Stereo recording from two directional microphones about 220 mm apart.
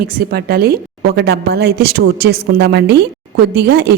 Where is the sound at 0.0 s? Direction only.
45° right (ahead or behind).